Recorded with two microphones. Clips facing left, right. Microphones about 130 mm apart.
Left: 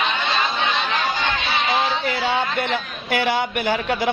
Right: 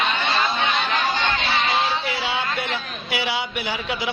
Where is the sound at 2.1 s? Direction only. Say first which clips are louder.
Left 4 dB; 45° left (ahead or behind).